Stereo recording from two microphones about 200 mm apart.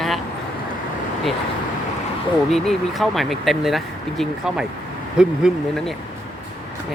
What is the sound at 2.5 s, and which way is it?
Speech, centre (ahead or behind).